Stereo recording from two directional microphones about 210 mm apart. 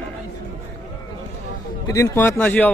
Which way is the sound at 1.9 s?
10° left (ahead or behind).